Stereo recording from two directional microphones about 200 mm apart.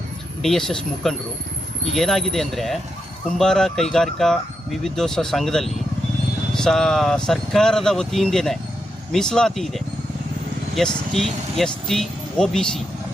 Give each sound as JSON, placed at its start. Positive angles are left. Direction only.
{"t": 0.4, "sound": "speech", "side_deg": 0}